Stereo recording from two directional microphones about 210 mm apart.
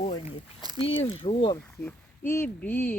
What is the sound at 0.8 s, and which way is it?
Speech, 65° left (ahead or behind).